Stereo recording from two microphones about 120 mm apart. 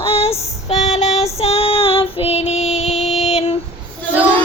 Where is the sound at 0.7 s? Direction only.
70° left (ahead or behind).